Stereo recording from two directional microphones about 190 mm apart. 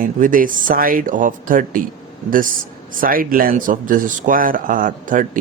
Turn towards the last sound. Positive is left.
turn(degrees=-45)  # may be behind; listen again after turning